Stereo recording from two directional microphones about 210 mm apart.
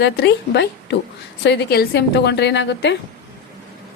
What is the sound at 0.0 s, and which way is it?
A woman's voice, 55° left (ahead or behind).